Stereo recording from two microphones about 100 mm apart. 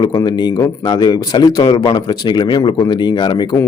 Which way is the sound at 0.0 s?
40° left (ahead or behind).